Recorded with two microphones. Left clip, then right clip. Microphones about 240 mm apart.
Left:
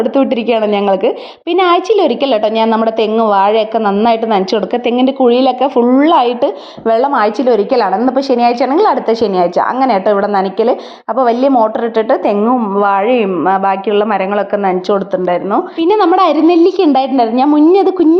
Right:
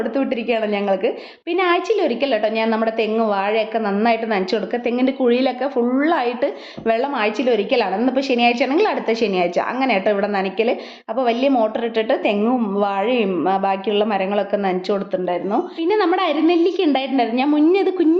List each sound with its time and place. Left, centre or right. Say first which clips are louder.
0.0 s a woman's voice: left 9 dB; left